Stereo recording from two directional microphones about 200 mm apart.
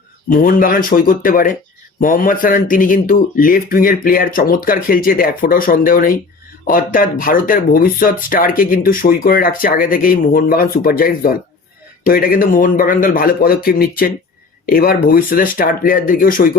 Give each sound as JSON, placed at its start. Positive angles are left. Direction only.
{"t": 0.3, "sound": "speech", "side_deg": 45}